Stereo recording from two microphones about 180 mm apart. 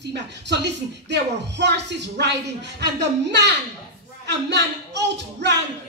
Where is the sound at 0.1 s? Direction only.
70° right (ahead or behind).